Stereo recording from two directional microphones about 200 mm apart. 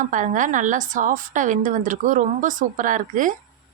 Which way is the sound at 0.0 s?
40° right (ahead or behind).